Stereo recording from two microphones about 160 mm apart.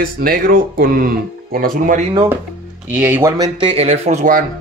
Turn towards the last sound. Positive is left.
turn(degrees=-40)  # may be behind; listen again after turning